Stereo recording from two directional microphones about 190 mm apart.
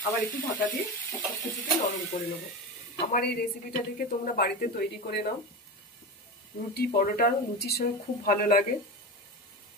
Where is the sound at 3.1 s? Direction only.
50° left (ahead or behind).